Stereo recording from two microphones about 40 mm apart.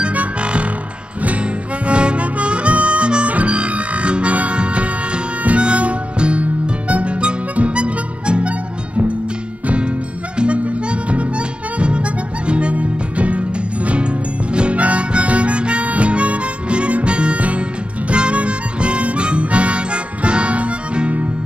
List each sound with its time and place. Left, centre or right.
0.0 s music: right
1.9 s harmonica: right
10.3 s harmonica: right
14.5 s harmonica: right